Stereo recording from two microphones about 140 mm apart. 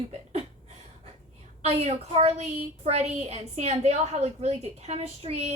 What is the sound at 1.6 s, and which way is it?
A woman's voice, 50° right (ahead or behind).